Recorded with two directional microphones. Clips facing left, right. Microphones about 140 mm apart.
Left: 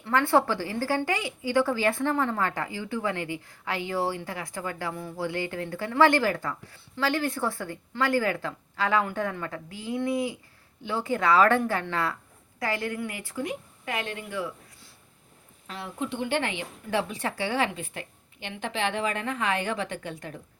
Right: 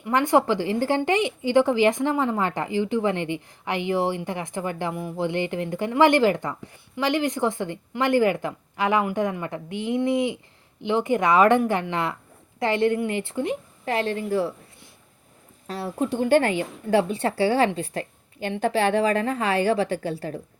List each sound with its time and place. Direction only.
0.0 s a woman's voice: 15° right (ahead or behind); by 14.5 s 35° right (ahead or behind)
15.6 s a woman's voice: 40° right (ahead or behind)
16.9 s a woman's voice: 30° right (ahead or behind)